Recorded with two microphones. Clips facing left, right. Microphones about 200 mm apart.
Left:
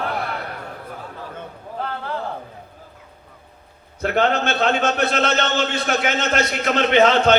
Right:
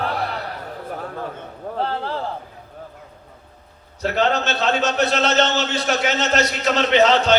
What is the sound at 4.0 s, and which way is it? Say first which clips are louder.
A man's voice: left 1 dB; 55° left (ahead or behind).